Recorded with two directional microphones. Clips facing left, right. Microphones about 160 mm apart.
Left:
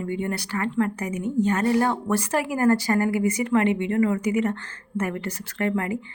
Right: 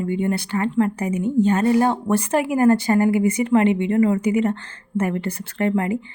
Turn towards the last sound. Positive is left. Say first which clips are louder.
# right 4 dB
turn(degrees=-25)  # may be behind; listen again after turning